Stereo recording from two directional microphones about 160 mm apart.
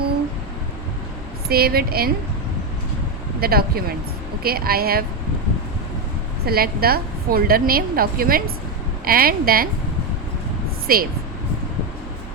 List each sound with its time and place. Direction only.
1.5 s a woman's voice: 70° right (ahead or behind)
3.4 s a woman's voice: 75° right (ahead or behind)
6.4 s a woman's voice: 75° right (ahead or behind)
10.9 s a woman's voice: 70° right (ahead or behind)